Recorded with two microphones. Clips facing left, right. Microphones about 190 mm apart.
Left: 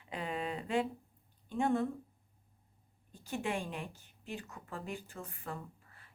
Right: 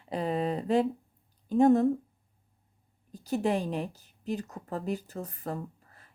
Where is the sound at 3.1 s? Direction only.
40° right (ahead or behind).